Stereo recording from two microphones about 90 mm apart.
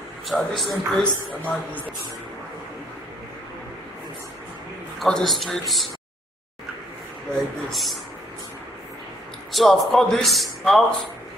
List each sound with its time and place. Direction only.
0.3 s a man's voice: centre (ahead or behind)
1.4 s a man's voice: 15° left (ahead or behind)
5.0 s a man's voice: 5° left (ahead or behind)
7.7 s a man's voice: centre (ahead or behind)
9.5 s a man's voice: 5° left (ahead or behind)